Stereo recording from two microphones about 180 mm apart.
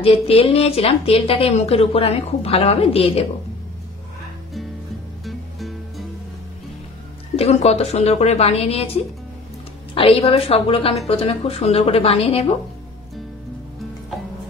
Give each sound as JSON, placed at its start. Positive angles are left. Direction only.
{"t": 0.0, "sound": "a woman's voice", "side_deg": 30}
{"t": 5.2, "sound": "music", "side_deg": 0}
{"t": 7.3, "sound": "a woman's voice", "side_deg": 35}